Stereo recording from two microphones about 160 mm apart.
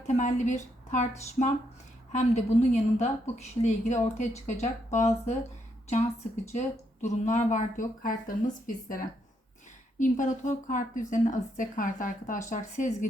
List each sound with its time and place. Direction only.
0.2 s a woman's voice: 50° left (ahead or behind)
6.5 s a woman's voice: 45° left (ahead or behind)